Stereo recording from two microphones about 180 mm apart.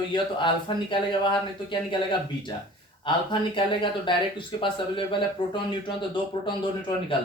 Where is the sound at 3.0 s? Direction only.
25° left (ahead or behind).